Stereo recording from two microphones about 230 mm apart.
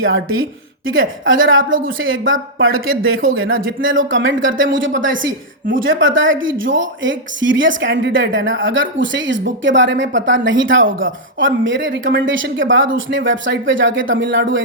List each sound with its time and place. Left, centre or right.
0.0 s speech: right